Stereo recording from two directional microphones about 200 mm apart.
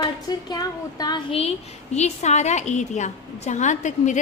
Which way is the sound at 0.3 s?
20° left (ahead or behind).